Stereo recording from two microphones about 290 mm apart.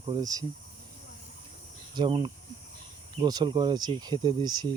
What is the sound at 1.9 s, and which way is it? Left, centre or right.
Speech, centre.